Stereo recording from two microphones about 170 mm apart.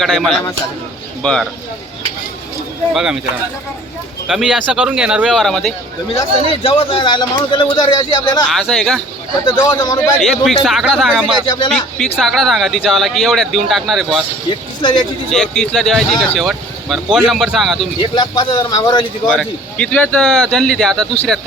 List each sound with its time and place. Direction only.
0.0 s speech: centre (ahead or behind)
2.9 s speech: 5° right (ahead or behind)
4.3 s speech: 5° right (ahead or behind)
6.6 s speech: 35° left (ahead or behind)
8.4 s speech: centre (ahead or behind)
9.6 s speech: 25° left (ahead or behind)
10.0 s speech: centre (ahead or behind)
14.8 s a man's voice: 30° left (ahead or behind)
15.3 s speech: centre (ahead or behind)
18.1 s speech: 25° left (ahead or behind)
19.3 s speech: 5° left (ahead or behind)